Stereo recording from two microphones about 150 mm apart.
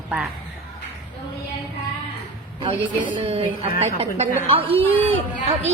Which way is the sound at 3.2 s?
40° right (ahead or behind).